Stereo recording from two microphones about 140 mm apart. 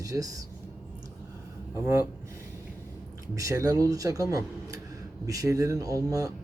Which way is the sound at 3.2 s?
25° right (ahead or behind).